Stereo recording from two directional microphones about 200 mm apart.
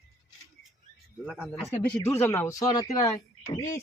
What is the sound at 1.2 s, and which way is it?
Speech, 5° right (ahead or behind).